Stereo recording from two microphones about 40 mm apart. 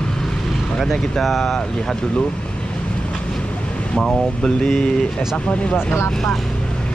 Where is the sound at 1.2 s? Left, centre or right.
Centre.